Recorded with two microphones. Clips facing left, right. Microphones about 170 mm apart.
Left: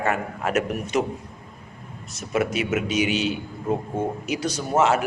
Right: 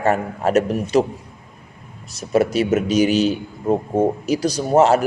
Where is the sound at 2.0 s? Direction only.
35° right (ahead or behind).